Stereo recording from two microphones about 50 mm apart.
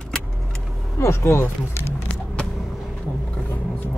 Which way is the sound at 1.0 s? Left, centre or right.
Left.